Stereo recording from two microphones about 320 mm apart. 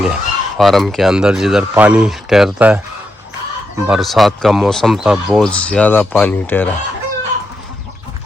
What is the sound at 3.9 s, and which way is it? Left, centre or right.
Speech, centre.